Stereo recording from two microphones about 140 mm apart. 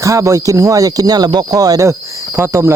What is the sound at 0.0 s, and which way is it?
Speech, 20° right (ahead or behind).